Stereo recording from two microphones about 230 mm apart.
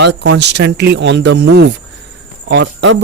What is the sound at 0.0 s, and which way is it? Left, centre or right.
Speech, right.